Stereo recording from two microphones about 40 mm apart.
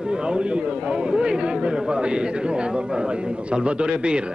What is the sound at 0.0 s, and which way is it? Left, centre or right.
A man's voice, right.